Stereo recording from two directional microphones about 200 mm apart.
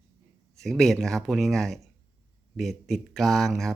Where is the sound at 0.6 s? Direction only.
Centre (ahead or behind).